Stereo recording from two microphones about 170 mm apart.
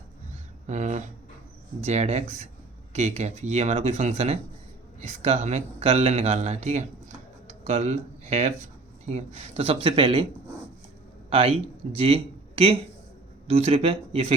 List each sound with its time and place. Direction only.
0.7 s speech: 45° right (ahead or behind); by 10.2 s 30° right (ahead or behind)
11.3 s speech: 35° right (ahead or behind)